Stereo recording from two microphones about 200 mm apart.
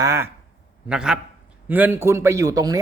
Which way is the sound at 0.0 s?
15° right (ahead or behind).